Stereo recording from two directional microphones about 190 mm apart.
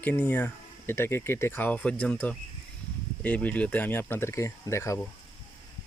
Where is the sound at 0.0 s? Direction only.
10° left (ahead or behind).